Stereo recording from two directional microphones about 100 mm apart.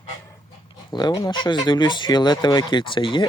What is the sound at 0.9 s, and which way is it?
Speech, 45° left (ahead or behind).